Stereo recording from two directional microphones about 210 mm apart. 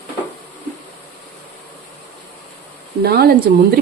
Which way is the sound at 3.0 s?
50° right (ahead or behind).